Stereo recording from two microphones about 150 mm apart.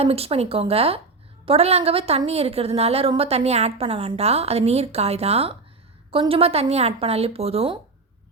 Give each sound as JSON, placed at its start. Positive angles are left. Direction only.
{"t": 0.0, "sound": "a woman's voice", "side_deg": -40}